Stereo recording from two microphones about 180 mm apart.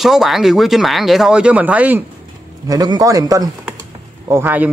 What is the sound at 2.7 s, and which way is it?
A man's voice, 20° right (ahead or behind).